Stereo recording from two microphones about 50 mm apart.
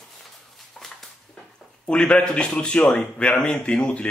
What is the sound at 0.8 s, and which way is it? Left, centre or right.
Dog, centre.